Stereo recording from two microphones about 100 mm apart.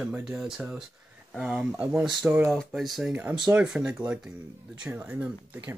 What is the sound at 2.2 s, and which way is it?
Speech, 20° right (ahead or behind).